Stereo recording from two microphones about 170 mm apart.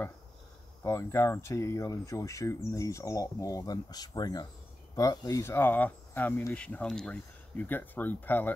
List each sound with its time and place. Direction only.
0.8 s speech: 15° left (ahead or behind)